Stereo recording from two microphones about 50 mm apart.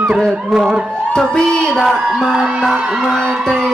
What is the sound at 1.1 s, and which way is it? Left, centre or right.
Speech, centre.